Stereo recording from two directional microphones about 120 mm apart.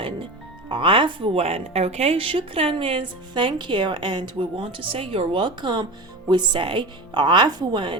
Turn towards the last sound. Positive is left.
turn(degrees=-40)  # may be behind; listen again after turning